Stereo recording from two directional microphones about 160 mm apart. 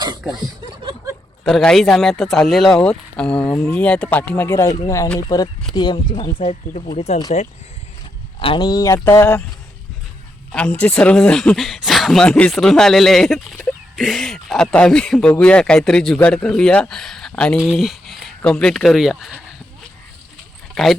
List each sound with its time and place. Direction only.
1.5 s speech: centre (ahead or behind); by 6.3 s 25° left (ahead or behind)
6.4 s speech: 40° left (ahead or behind)
8.4 s speech: 30° left (ahead or behind); by 9.4 s 15° left (ahead or behind)
10.5 s speech: 5° left (ahead or behind)
17.6 s a sound: 5° right (ahead or behind)
18.6 s speech: centre (ahead or behind)
20.8 s speech: centre (ahead or behind)